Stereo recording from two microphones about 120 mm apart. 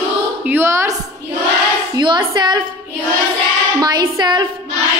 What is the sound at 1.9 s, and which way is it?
Speech, 40° right (ahead or behind).